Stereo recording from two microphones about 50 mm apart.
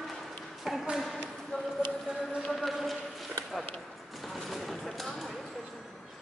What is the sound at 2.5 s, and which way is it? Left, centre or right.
Run, centre.